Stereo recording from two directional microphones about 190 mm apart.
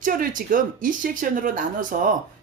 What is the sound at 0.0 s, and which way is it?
Speech, 45° right (ahead or behind).